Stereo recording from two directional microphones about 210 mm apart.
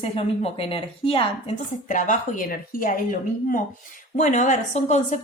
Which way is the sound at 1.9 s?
40° left (ahead or behind).